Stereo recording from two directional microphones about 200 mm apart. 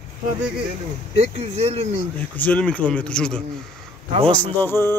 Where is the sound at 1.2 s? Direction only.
30° right (ahead or behind).